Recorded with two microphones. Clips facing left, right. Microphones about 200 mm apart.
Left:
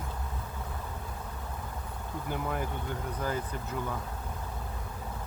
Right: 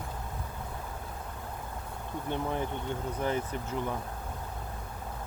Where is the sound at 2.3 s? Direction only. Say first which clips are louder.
Right 2 dB; 25° right (ahead or behind).